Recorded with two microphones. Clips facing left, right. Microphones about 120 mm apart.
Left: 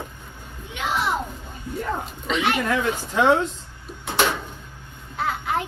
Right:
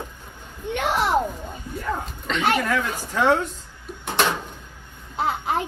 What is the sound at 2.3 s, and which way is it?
Speech, 5° left (ahead or behind).